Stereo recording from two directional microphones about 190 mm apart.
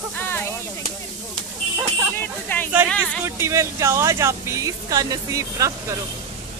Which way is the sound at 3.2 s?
15° right (ahead or behind).